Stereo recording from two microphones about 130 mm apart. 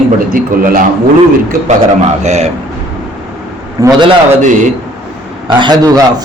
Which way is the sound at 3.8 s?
25° right (ahead or behind).